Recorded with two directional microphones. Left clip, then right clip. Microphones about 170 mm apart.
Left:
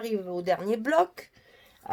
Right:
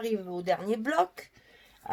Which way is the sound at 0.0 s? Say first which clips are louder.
Left 2 dB; 40° left (ahead or behind).